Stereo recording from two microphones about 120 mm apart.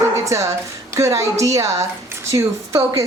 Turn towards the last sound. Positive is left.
turn(degrees=-25)  # may be behind; listen again after turning